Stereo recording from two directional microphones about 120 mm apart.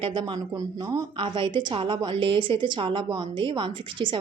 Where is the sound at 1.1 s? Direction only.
45° right (ahead or behind).